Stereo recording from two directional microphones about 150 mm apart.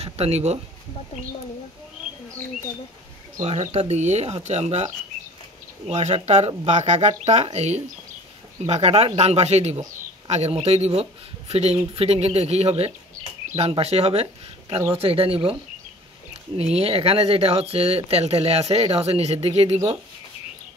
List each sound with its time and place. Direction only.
0.0 s speech: 45° right (ahead or behind)
3.3 s speech: 45° right (ahead or behind)
16.5 s speech: 40° right (ahead or behind)